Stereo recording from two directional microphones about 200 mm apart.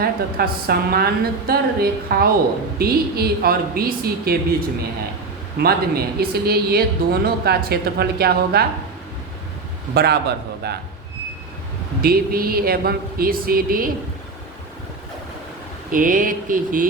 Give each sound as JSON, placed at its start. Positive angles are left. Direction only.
{"t": 0.0, "sound": "speech", "side_deg": -50}
{"t": 5.5, "sound": "speech", "side_deg": -50}
{"t": 9.9, "sound": "speech", "side_deg": -55}
{"t": 12.0, "sound": "speech", "side_deg": -50}
{"t": 15.9, "sound": "speech", "side_deg": -45}